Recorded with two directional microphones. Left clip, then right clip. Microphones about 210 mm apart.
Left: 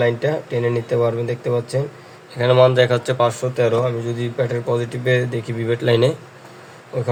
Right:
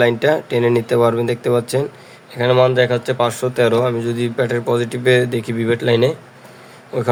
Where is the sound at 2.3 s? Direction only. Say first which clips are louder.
Even; 15° right (ahead or behind).